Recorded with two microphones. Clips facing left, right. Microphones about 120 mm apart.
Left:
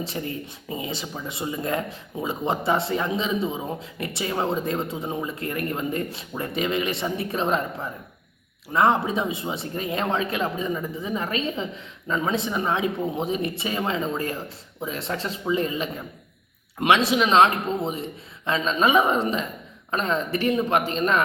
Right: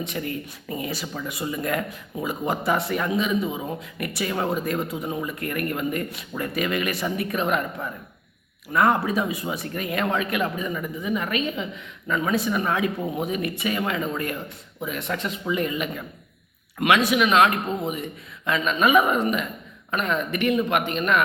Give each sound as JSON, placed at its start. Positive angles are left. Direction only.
{"t": 0.0, "sound": "speech", "side_deg": 30}